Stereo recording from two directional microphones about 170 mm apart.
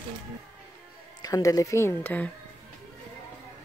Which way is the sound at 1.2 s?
20° left (ahead or behind).